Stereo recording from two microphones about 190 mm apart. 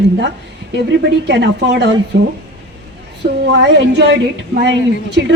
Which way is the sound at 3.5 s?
65° right (ahead or behind).